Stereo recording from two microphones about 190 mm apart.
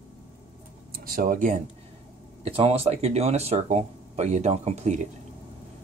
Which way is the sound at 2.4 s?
30° right (ahead or behind).